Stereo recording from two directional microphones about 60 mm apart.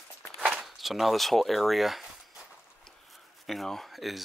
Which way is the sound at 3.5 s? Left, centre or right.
Centre.